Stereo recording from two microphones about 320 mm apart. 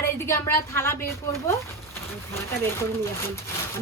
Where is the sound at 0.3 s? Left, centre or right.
Centre.